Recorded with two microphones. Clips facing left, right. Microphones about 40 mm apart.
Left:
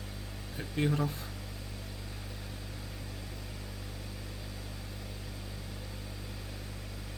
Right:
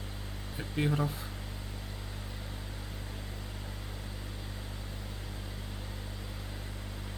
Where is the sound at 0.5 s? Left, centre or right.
Centre.